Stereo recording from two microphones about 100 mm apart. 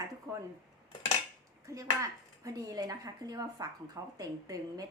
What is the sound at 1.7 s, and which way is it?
Speech, 30° right (ahead or behind).